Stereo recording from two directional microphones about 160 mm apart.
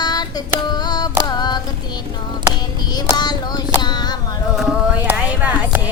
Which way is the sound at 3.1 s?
25° left (ahead or behind).